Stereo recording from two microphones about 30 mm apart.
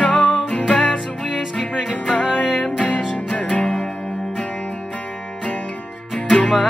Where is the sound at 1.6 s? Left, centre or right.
Centre.